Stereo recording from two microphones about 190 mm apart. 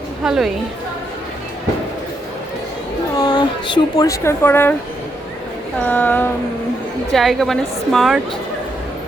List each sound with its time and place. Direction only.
0.3 s a woman's voice: centre (ahead or behind)
3.2 s a woman's voice: 20° left (ahead or behind)
5.8 s a sound: 10° left (ahead or behind)
7.1 s a woman's voice: centre (ahead or behind)